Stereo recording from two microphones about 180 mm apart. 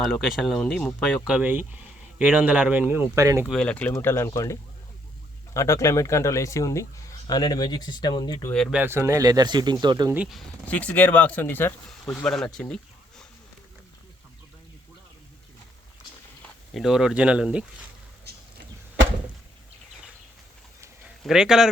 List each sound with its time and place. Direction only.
0.0 s speech: centre (ahead or behind); by 3.4 s 15° right (ahead or behind)
3.4 s speech: 5° left (ahead or behind)
5.5 s speech: 15° left (ahead or behind)
8.5 s speech: centre (ahead or behind)
8.8 s speech: 15° right (ahead or behind)
10.2 s speech: centre (ahead or behind)
16.7 s speech: 5° right (ahead or behind)
21.2 s speech: 5° right (ahead or behind)